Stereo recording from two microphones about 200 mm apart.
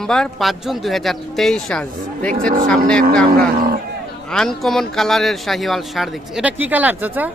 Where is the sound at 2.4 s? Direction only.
45° right (ahead or behind).